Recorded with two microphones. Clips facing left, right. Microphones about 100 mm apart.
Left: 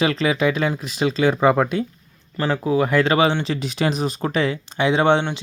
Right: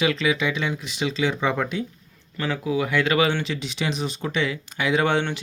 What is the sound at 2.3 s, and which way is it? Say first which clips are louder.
Speech: left 5 dB; 35° left (ahead or behind).